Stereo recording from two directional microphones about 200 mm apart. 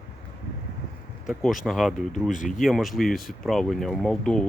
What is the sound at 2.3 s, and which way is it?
Speech, 40° left (ahead or behind).